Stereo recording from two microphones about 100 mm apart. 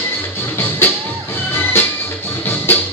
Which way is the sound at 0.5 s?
25° left (ahead or behind).